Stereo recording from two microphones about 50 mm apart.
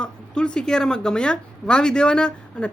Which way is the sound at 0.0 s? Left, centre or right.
Centre.